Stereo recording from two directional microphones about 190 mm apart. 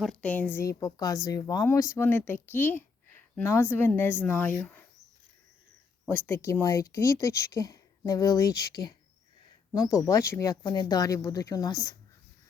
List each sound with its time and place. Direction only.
0.0 s speech: 5° left (ahead or behind)
6.1 s speech: 15° left (ahead or behind)